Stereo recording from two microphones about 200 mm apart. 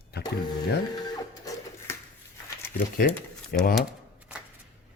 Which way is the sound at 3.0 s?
50° left (ahead or behind).